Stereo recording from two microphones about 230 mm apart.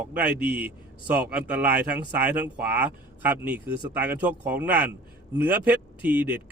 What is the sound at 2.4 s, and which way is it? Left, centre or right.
Speech, centre.